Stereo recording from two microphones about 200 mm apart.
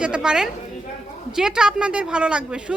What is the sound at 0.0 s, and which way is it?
Speech, 5° right (ahead or behind).